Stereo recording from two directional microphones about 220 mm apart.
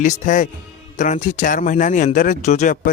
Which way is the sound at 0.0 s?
35° left (ahead or behind).